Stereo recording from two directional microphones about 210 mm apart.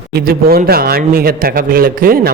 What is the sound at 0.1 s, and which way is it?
Mantra, 45° right (ahead or behind).